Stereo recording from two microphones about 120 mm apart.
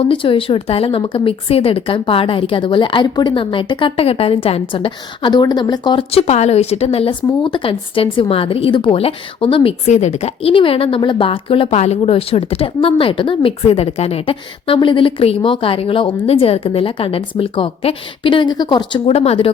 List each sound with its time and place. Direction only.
0.0 s speech: 45° left (ahead or behind)
6.1 s speech: 60° left (ahead or behind)
9.8 s a woman's voice: 70° left (ahead or behind)
10.5 s speech: 45° left (ahead or behind)
11.8 s speech: 60° left (ahead or behind)